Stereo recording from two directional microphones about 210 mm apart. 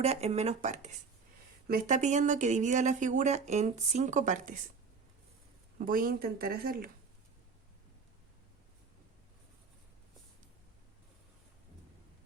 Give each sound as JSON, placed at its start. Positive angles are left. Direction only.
{"t": 0.0, "sound": "speech", "side_deg": -30}
{"t": 5.8, "sound": "speech", "side_deg": -45}